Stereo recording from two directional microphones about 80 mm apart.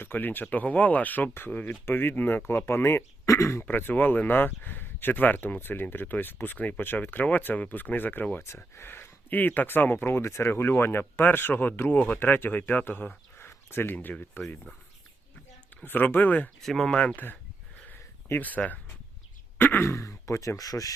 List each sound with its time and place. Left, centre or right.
0.0 s speech: left
8.4 s speech: left
15.8 s speech: left
16.6 s speech: centre
18.3 s speech: left